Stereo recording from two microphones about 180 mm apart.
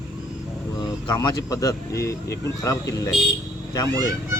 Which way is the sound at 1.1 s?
25° left (ahead or behind).